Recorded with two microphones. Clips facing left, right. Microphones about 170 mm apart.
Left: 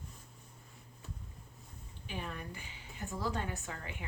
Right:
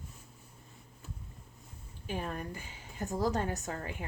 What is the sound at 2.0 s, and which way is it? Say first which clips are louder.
A woman's voice: right 5 dB; 45° right (ahead or behind).